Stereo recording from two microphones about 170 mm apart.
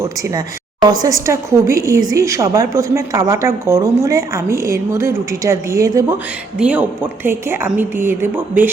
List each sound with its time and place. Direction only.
0.0 s a woman's voice: 20° right (ahead or behind)
6.6 s a woman's voice: 5° right (ahead or behind)